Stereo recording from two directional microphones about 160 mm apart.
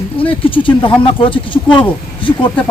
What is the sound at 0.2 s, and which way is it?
Speech, 35° left (ahead or behind).